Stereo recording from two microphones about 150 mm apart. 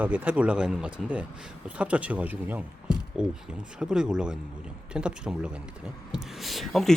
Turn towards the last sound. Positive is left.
turn(degrees=0)  # may be behind; listen again after turning